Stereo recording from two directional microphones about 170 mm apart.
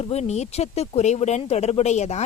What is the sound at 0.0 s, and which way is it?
A woman's voice, 40° left (ahead or behind).